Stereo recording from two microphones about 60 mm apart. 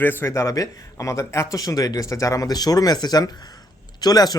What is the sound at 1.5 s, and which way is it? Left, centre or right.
Speech, left.